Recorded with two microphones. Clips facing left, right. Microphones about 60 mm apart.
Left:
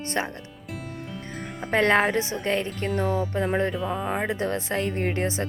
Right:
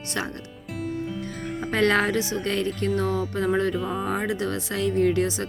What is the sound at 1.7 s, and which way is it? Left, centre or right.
Speech, left.